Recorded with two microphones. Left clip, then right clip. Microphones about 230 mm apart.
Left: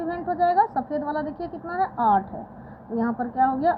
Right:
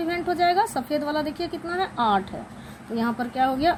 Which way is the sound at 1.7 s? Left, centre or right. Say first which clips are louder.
Left 2 dB; right.